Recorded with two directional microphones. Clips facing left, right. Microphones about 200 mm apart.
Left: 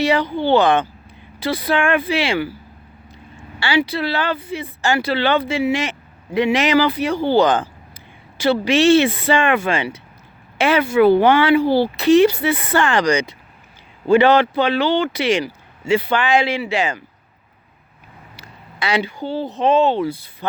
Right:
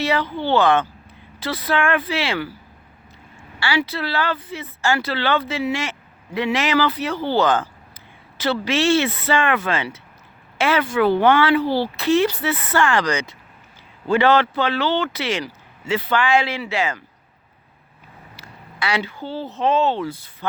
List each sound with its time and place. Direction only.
0.0 s speech: 15° left (ahead or behind)
3.6 s speech: 15° left (ahead or behind)
18.3 s speech: 20° left (ahead or behind)